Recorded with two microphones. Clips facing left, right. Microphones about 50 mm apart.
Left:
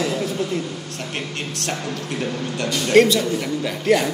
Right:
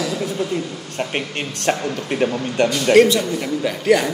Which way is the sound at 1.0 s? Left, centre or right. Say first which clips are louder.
Right 7 dB; right.